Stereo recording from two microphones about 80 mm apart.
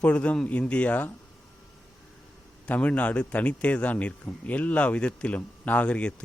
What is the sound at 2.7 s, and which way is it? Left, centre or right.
A man's voice, centre.